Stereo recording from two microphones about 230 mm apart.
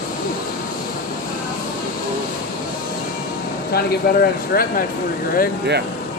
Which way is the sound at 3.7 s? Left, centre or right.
Left.